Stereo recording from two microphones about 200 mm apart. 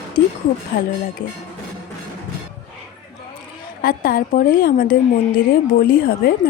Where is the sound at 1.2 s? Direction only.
65° left (ahead or behind).